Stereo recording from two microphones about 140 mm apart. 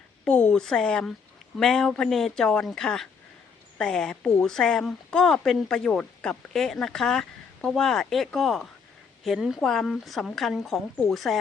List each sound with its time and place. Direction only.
0.3 s a woman's voice: 5° left (ahead or behind)